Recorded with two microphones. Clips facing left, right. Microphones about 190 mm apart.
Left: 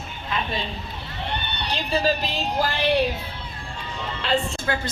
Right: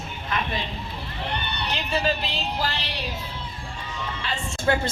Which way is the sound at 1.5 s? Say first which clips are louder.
Left 3 dB; 35° left (ahead or behind).